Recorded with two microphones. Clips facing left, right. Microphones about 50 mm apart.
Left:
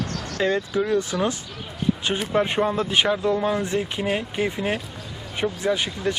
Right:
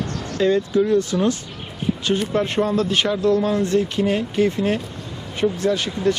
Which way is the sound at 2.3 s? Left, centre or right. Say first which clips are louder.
Left 2 dB; centre.